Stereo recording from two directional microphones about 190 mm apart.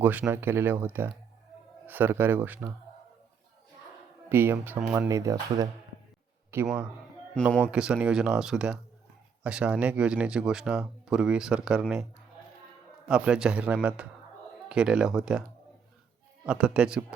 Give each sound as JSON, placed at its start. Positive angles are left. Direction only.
{"t": 0.0, "sound": "speech", "side_deg": -10}
{"t": 4.3, "sound": "a man's voice", "side_deg": -10}
{"t": 13.1, "sound": "speech", "side_deg": -5}
{"t": 16.5, "sound": "speech", "side_deg": -5}